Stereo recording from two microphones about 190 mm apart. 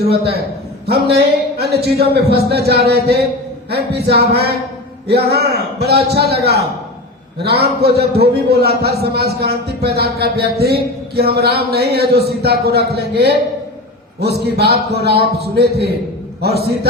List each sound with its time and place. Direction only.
0.1 s a man's voice: 60° right (ahead or behind)